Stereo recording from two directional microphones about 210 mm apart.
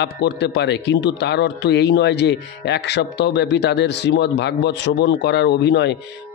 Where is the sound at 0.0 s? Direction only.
55° left (ahead or behind).